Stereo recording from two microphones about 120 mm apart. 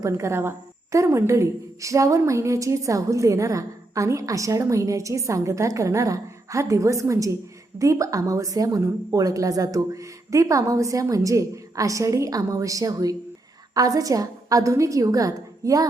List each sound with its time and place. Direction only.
0.0 s a woman's voice: 25° right (ahead or behind)